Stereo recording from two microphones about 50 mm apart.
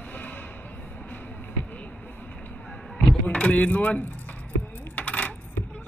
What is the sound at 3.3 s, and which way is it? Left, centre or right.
Speech, left.